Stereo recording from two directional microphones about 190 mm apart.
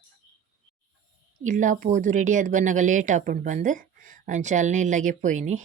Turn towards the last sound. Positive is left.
turn(degrees=-40)  # may be behind; listen again after turning